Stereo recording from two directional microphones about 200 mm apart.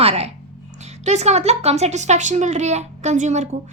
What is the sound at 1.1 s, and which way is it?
A woman's voice, 35° right (ahead or behind).